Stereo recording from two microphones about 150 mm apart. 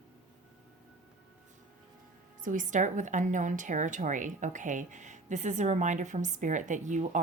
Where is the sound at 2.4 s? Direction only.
60° right (ahead or behind).